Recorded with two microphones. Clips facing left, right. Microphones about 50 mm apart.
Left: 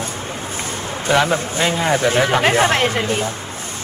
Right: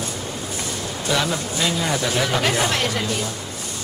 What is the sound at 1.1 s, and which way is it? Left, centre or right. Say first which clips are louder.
Speech: left 6 dB; left.